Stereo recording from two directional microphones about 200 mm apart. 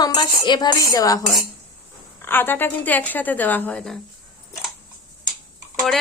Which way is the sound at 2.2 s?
10° left (ahead or behind).